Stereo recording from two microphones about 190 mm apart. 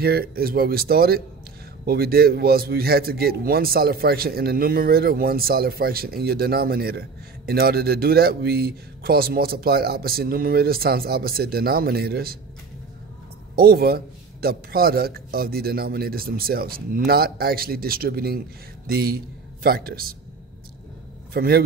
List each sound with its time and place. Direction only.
0.0 s a man's voice: 55° right (ahead or behind)
13.6 s a man's voice: 55° right (ahead or behind)
21.3 s a man's voice: 55° right (ahead or behind)